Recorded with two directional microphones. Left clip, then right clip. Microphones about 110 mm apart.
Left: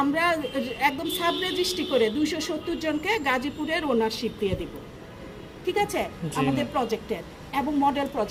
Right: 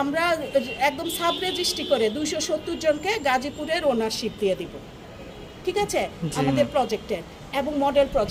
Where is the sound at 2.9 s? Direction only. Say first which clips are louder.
Right 3 dB; 40° right (ahead or behind).